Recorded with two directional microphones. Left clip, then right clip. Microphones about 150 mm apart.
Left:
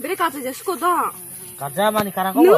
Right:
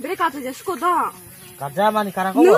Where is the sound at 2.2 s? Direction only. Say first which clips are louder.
Even; 15° left (ahead or behind).